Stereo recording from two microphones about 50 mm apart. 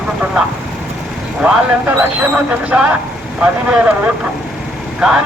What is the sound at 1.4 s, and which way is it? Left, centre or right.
Speech, right.